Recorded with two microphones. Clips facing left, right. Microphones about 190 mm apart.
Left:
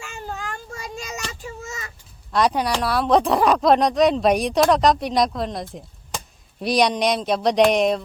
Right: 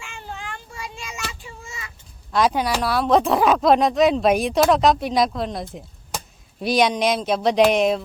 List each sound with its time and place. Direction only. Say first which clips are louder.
0.0 s cat: left 3 dB; 40° left (ahead or behind)
1.3 s child singing: left 5 dB; 40° left (ahead or behind)
2.3 s speech: even; centre (ahead or behind)